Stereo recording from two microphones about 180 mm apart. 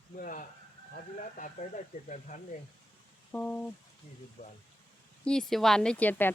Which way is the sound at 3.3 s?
10° left (ahead or behind).